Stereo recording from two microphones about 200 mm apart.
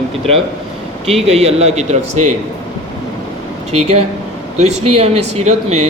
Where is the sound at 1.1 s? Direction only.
30° right (ahead or behind).